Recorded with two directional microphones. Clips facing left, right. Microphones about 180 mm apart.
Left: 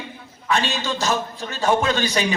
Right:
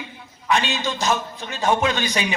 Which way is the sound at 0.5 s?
40° left (ahead or behind).